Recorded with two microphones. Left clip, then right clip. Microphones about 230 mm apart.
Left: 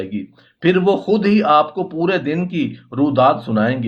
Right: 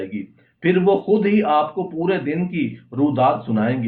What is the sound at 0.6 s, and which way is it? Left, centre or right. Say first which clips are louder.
Speech: left 2 dB; left.